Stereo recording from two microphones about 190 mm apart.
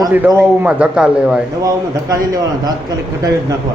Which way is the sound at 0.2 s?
10° right (ahead or behind).